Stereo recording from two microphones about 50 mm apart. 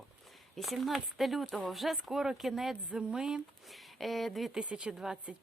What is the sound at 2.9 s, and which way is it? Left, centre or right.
Speech, centre.